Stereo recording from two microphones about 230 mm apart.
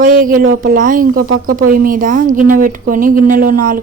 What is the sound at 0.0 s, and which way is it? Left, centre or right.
A woman's voice, right.